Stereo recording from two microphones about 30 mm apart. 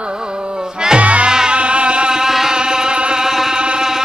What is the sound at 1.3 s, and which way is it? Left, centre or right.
Music, right.